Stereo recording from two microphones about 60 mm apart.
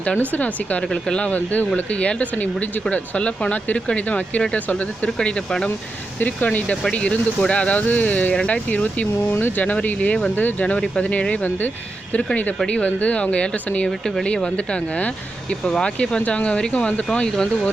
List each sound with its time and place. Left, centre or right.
0.0 s speech: left
0.8 s speech: centre
6.1 s speech: left
10.3 s speech: left
14.0 s speech: centre